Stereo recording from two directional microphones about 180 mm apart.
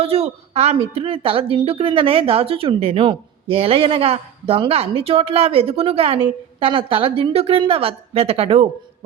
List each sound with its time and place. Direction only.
0.0 s a woman's voice: 35° right (ahead or behind)